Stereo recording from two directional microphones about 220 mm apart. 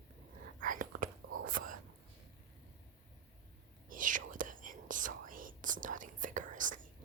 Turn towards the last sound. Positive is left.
turn(degrees=-35)  # may be behind; listen again after turning